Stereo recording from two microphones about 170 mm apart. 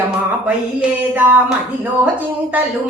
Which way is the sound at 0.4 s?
5° right (ahead or behind).